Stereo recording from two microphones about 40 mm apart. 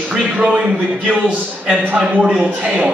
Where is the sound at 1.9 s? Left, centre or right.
Right.